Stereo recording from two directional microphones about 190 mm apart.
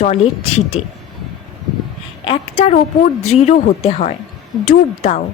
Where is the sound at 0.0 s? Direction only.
35° left (ahead or behind).